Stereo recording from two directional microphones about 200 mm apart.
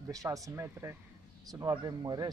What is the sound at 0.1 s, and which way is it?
Speech, 15° right (ahead or behind).